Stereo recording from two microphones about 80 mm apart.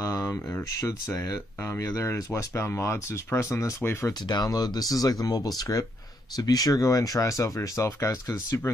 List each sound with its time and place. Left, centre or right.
0.0 s a sound: left
0.3 s speech: left
0.7 s speech: left
4.3 s speech: left